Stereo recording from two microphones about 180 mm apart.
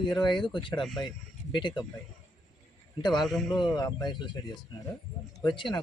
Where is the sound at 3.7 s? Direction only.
20° left (ahead or behind).